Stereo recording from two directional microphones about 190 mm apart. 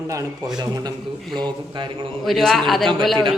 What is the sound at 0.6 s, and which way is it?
Speech, 20° right (ahead or behind).